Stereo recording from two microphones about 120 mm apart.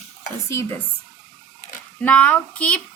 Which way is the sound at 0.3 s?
25° left (ahead or behind).